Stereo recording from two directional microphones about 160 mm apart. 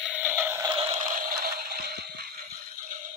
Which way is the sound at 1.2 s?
75° right (ahead or behind).